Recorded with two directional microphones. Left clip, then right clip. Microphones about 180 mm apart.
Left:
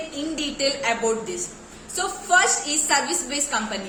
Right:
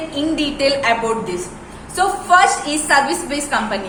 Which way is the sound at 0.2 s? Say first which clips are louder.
Right 8 dB; 10° left (ahead or behind).